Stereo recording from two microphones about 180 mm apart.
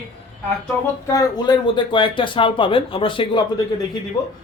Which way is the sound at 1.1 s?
25° left (ahead or behind).